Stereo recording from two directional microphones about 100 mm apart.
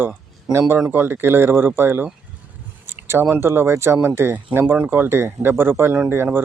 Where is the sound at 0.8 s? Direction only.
20° right (ahead or behind).